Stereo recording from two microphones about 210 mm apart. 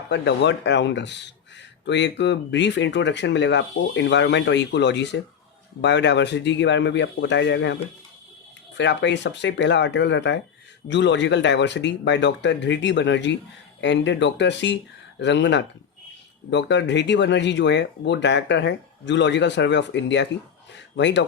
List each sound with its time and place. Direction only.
0.1 s speech: 55° left (ahead or behind)
8.8 s speech: 55° left (ahead or behind)